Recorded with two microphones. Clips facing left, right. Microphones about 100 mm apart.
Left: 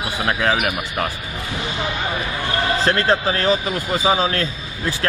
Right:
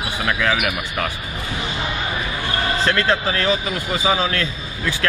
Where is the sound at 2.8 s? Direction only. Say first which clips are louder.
Left 1 dB; 35° left (ahead or behind).